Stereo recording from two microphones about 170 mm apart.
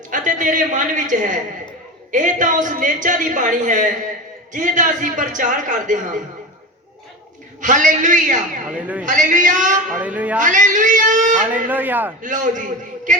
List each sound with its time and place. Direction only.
0.1 s a woman's voice: 50° right (ahead or behind)
7.6 s a woman's voice: 50° right (ahead or behind)
8.8 s speech: 10° right (ahead or behind)
9.0 s a woman's voice: 50° right (ahead or behind)
9.9 s speech: 10° right (ahead or behind)
10.4 s a man's voice: 50° right (ahead or behind)
11.7 s speech: 10° right (ahead or behind)
12.2 s a woman's voice: 50° right (ahead or behind)